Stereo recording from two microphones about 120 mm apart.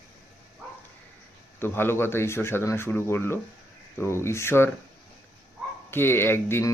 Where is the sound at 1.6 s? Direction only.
20° left (ahead or behind).